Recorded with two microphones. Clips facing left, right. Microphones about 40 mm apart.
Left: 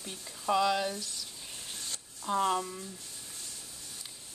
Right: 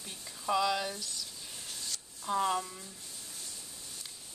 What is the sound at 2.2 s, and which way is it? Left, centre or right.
Speech, centre.